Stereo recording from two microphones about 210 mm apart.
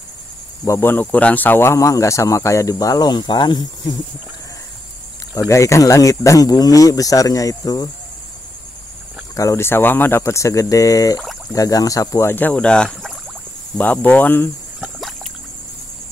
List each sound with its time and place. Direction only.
0.7 s speech: 10° left (ahead or behind)
5.5 s speech: 15° left (ahead or behind)
9.3 s speech: 15° left (ahead or behind)
14.8 s rowboat: centre (ahead or behind)